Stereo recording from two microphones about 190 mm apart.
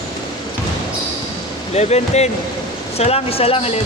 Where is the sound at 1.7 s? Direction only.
35° left (ahead or behind).